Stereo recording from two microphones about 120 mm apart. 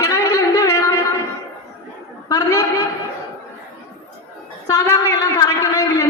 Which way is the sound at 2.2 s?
30° left (ahead or behind).